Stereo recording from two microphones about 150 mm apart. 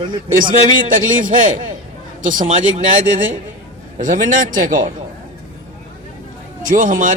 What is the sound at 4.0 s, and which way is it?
Speech, 60° right (ahead or behind).